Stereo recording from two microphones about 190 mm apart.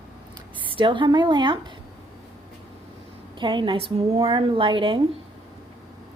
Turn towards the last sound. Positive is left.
turn(degrees=-25)  # may be behind; listen again after turning